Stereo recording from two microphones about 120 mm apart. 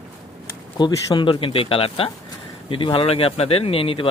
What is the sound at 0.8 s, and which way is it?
A man's voice, 35° left (ahead or behind).